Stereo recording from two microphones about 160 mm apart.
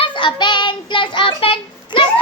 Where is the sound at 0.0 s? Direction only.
30° left (ahead or behind).